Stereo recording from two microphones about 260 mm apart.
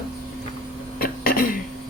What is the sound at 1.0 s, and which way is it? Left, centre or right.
Cough, left.